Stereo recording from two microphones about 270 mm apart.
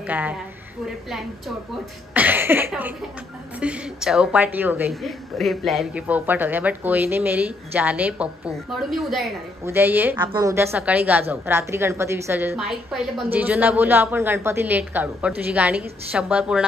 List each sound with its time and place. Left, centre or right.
0.0 s a woman's voice: centre
2.1 s a sound: centre
3.5 s a woman's voice: centre